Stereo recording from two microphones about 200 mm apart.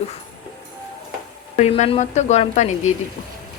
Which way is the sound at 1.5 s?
35° left (ahead or behind).